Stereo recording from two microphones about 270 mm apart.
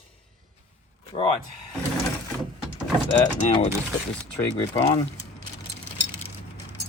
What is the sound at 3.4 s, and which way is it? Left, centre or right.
Speech, left.